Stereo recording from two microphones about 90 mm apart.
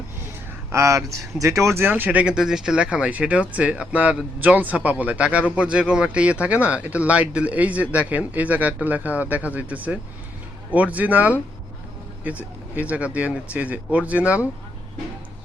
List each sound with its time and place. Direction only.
0.7 s speech: 35° right (ahead or behind); by 14.4 s 15° right (ahead or behind)